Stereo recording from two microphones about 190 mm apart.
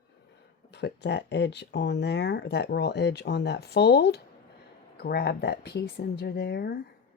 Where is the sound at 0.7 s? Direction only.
65° left (ahead or behind).